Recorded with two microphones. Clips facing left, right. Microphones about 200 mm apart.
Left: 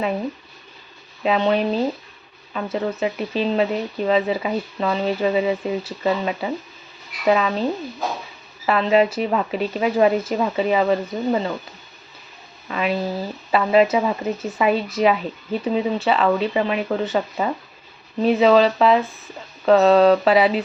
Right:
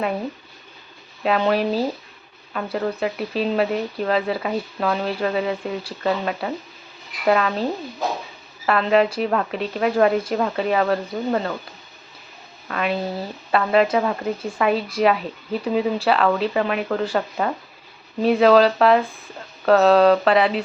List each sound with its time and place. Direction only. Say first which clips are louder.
1.2 s speech: left 1 dB; centre (ahead or behind)
8.6 s speech: left 1 dB; centre (ahead or behind)
12.6 s speech: left 1 dB; 5° left (ahead or behind)